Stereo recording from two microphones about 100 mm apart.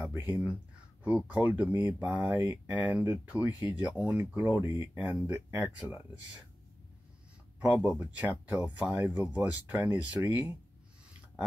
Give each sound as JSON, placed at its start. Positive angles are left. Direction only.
{"t": 0.1, "sound": "speech", "side_deg": -25}
{"t": 7.6, "sound": "speech", "side_deg": -15}